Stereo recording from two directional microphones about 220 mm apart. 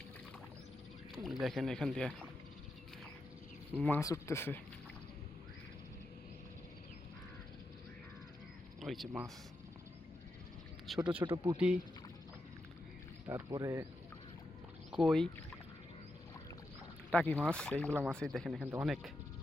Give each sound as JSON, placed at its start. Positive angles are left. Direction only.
{"t": 1.1, "sound": "speech", "side_deg": 0}
{"t": 3.8, "sound": "speech", "side_deg": 10}
{"t": 8.8, "sound": "speech", "side_deg": 0}
{"t": 10.8, "sound": "speech", "side_deg": -5}
{"t": 11.2, "sound": "speech", "side_deg": -20}
{"t": 13.2, "sound": "speech", "side_deg": -15}
{"t": 14.9, "sound": "speech", "side_deg": 0}
{"t": 17.1, "sound": "speech", "side_deg": 5}
{"t": 17.8, "sound": "speech", "side_deg": -10}
{"t": 18.1, "sound": "speech", "side_deg": 5}